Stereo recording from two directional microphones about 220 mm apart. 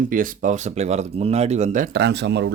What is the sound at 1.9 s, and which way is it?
Speech, 50° right (ahead or behind).